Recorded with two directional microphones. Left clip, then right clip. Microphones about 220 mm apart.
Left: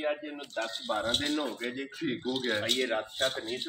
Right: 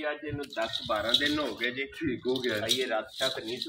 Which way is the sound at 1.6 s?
55° left (ahead or behind).